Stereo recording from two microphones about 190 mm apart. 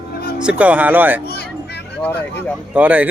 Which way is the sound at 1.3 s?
60° left (ahead or behind).